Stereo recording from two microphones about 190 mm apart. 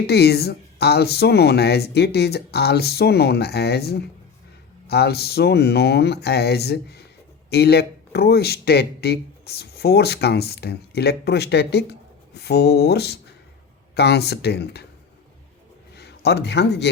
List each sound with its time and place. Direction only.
0.1 s a man's voice: 60° left (ahead or behind)
16.0 s a man's voice: 60° left (ahead or behind)